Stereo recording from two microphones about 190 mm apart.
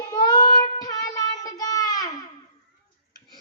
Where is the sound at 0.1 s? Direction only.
20° left (ahead or behind).